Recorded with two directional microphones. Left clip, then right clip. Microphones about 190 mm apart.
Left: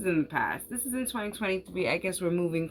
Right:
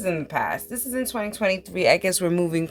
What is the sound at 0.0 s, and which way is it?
A woman's voice, 50° right (ahead or behind).